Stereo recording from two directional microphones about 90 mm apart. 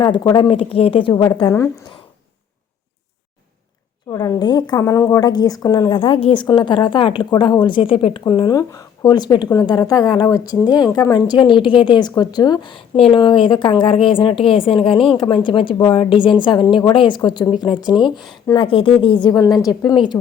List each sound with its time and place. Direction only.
0.3 s a woman's voice: 75° left (ahead or behind)
4.1 s speech: 40° left (ahead or behind)
4.4 s a woman's voice: 55° left (ahead or behind)
4.8 s speech: 35° left (ahead or behind)
5.2 s a woman's voice: 50° left (ahead or behind)
5.9 s a woman's voice: 70° left (ahead or behind)
8.4 s a woman's voice: 40° left (ahead or behind)
12.7 s a woman's voice: 75° left (ahead or behind)
16.9 s a woman's voice: 75° left (ahead or behind)
17.2 s a woman's voice: 60° left (ahead or behind)
19.4 s a woman's voice: 40° left (ahead or behind)